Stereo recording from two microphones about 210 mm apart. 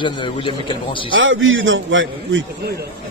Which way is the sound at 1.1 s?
65° right (ahead or behind).